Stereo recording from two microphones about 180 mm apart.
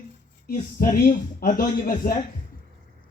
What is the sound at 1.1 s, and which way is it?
A man's voice, 50° left (ahead or behind).